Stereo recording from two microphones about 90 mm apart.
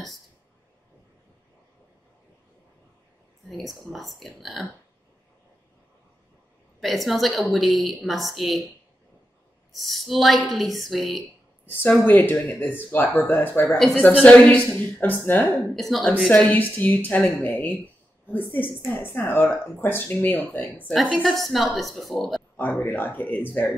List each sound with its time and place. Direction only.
3.4 s a woman's voice: centre (ahead or behind)
6.8 s a woman's voice: centre (ahead or behind)
9.7 s a woman's voice: centre (ahead or behind)
11.6 s speech: 20° left (ahead or behind)
15.7 s a woman's voice: centre (ahead or behind)
16.3 s speech: 15° left (ahead or behind)
20.9 s a woman's voice: centre (ahead or behind)
22.6 s speech: 20° left (ahead or behind)